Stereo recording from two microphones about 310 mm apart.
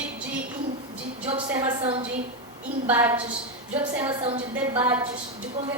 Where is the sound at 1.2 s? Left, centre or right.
Centre.